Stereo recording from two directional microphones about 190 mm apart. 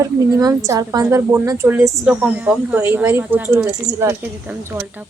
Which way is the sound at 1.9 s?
Centre (ahead or behind).